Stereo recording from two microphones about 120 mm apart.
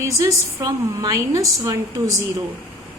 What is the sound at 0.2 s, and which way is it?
A woman's voice, 30° right (ahead or behind).